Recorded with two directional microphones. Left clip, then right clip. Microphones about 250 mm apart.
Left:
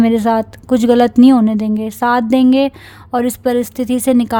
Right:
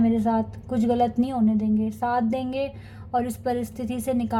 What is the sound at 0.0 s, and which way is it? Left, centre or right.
Speech, left.